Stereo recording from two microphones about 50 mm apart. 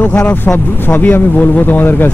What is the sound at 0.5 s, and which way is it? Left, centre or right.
Speech, left.